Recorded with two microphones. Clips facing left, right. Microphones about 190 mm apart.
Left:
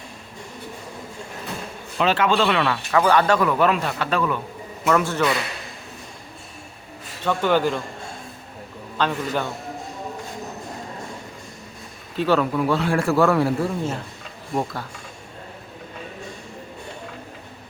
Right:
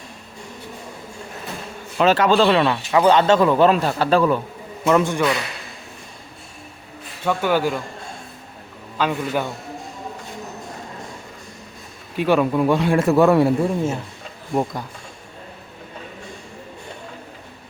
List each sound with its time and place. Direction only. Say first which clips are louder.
2.0 s speech: right 4 dB; 40° right (ahead or behind)
4.8 s speech: right 3 dB; 20° right (ahead or behind)
7.3 s a man's voice: even; 10° right (ahead or behind)
9.0 s a man's voice: right 2 dB; 10° right (ahead or behind)
12.1 s a man's voice: right 2 dB; 15° right (ahead or behind)